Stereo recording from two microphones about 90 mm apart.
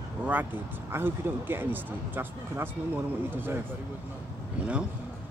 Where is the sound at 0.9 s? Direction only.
25° right (ahead or behind).